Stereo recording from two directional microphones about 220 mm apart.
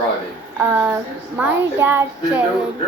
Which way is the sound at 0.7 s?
10° right (ahead or behind).